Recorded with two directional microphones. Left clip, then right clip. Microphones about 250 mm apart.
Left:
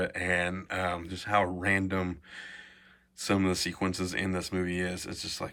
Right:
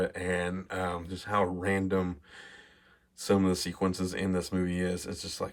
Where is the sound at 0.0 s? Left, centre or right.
Centre.